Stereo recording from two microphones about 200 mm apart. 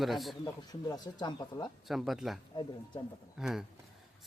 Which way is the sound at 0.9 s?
20° left (ahead or behind).